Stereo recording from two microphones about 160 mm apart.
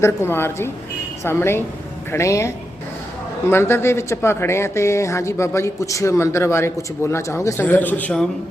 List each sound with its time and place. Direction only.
0.0 s speech: 15° left (ahead or behind)